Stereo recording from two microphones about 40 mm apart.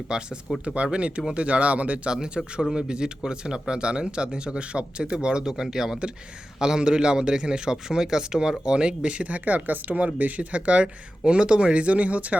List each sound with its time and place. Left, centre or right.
0.1 s speech: centre
0.6 s a man's voice: right
2.1 s a man's voice: centre